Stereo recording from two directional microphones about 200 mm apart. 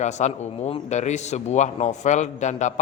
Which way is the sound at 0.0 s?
35° left (ahead or behind).